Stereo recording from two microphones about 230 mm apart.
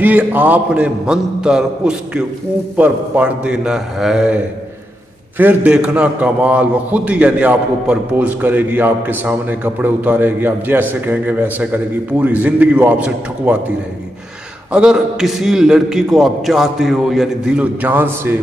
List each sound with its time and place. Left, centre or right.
0.0 s a man's voice: centre
5.4 s a man's voice: centre
14.7 s a man's voice: centre